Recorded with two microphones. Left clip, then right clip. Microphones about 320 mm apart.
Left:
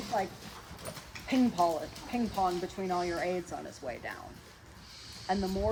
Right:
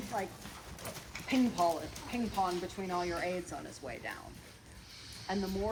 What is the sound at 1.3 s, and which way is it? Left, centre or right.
Speech, left.